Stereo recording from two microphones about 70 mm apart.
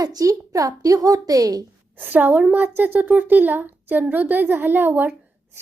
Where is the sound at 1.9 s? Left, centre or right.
Right.